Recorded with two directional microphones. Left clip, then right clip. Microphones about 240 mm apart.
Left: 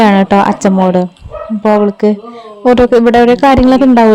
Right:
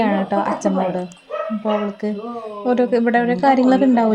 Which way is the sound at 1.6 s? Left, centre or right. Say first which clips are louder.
Left 15 dB; left.